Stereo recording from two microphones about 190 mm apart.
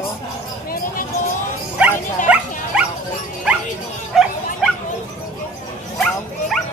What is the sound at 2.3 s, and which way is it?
Dog, 5° right (ahead or behind).